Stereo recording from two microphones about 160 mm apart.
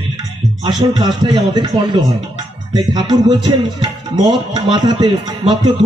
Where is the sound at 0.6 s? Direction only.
25° right (ahead or behind).